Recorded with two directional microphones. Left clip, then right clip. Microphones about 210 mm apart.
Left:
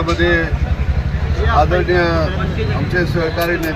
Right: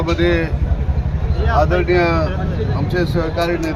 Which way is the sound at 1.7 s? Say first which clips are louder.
Even; 25° right (ahead or behind).